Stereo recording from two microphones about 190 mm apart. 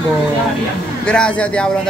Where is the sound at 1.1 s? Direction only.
5° left (ahead or behind).